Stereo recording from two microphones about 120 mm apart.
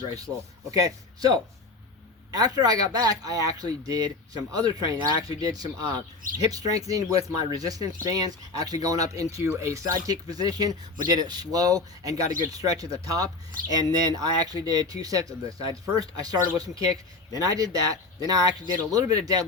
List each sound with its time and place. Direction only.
0.7 s a man's voice: 30° right (ahead or behind)